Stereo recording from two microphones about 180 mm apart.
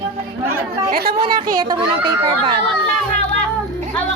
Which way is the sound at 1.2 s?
30° right (ahead or behind).